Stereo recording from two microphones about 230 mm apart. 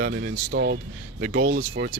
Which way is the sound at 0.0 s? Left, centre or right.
Right.